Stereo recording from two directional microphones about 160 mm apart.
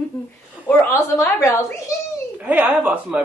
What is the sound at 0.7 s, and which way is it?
A woman's voice, 15° left (ahead or behind).